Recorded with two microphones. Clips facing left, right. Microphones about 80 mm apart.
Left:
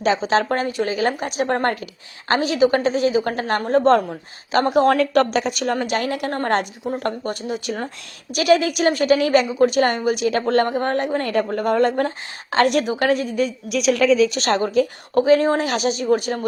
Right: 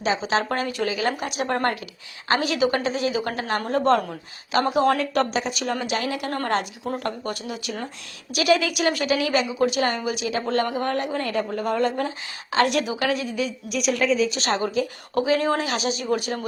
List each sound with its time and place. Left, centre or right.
0.3 s a woman's voice: left
2.5 s a woman's voice: left
5.1 s a woman's voice: left
7.0 s speech: left
8.3 s a woman's voice: left
13.7 s speech: left
14.3 s a woman's voice: left
15.6 s a woman's voice: left